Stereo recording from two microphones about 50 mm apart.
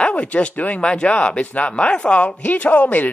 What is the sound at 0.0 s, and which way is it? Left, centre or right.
A man's voice, left.